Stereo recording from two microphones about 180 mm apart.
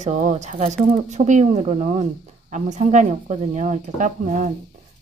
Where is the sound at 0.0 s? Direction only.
40° right (ahead or behind).